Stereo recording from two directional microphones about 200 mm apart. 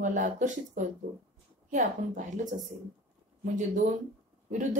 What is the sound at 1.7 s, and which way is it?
Speech, 40° right (ahead or behind).